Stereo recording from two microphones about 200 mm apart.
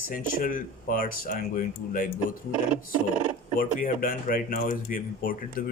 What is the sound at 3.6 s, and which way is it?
Speech, 45° left (ahead or behind).